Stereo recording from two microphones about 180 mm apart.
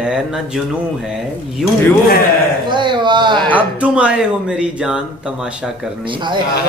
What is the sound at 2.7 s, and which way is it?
Speech, 25° right (ahead or behind).